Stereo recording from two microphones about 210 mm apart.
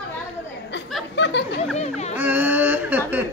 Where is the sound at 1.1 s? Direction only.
55° left (ahead or behind).